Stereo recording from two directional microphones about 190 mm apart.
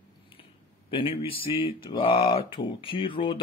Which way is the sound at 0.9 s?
30° left (ahead or behind).